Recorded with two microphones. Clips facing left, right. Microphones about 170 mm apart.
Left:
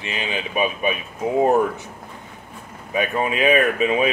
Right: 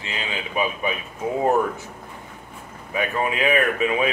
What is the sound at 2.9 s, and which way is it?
Speech, 20° left (ahead or behind).